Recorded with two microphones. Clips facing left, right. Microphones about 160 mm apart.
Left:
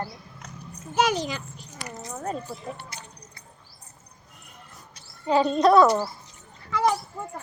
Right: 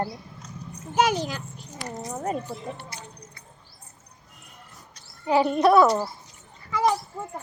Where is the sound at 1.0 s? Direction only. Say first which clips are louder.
Right 1 dB; 10° right (ahead or behind).